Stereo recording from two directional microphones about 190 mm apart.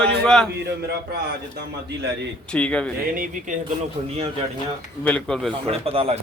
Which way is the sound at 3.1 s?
50° right (ahead or behind).